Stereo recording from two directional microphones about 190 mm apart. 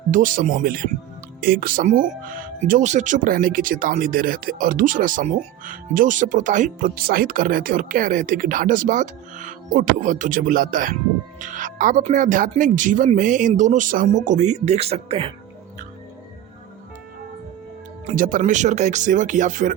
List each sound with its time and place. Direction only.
0.1 s speech: 45° right (ahead or behind)
18.0 s speech: 45° right (ahead or behind)